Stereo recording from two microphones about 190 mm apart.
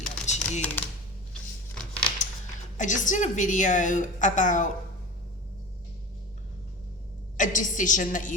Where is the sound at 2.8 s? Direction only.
40° left (ahead or behind).